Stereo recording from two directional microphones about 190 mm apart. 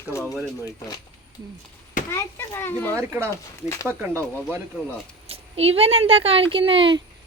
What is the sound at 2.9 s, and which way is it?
Speech, 15° right (ahead or behind).